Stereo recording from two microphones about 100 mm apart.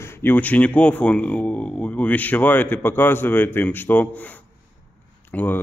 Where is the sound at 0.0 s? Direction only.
20° left (ahead or behind).